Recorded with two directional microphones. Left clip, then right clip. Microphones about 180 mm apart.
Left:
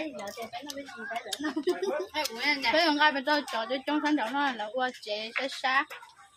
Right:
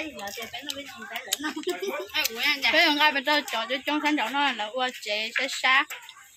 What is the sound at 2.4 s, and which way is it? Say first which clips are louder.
Speech: right 3 dB; 25° left (ahead or behind).